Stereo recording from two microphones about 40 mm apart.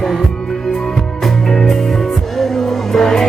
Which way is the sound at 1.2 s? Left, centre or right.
Centre.